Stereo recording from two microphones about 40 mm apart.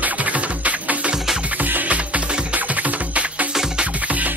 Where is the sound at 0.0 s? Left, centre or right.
Right.